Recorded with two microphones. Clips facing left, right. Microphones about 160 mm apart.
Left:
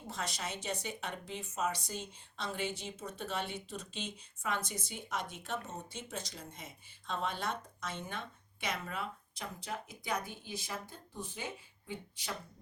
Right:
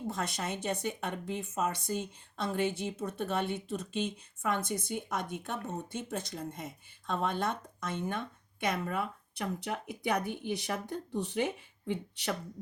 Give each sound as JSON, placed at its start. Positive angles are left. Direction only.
{"t": 0.1, "sound": "speech", "side_deg": -55}